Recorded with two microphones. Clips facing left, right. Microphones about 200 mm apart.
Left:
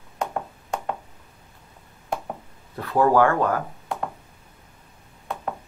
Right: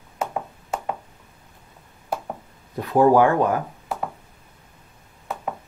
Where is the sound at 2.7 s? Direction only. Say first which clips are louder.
Right 3 dB; 15° right (ahead or behind).